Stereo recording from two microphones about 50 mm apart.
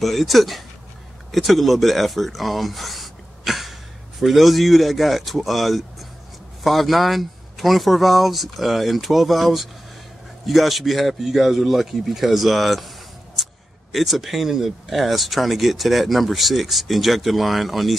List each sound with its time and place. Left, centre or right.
0.0 s speech: centre
13.4 s a sound: centre
13.9 s speech: centre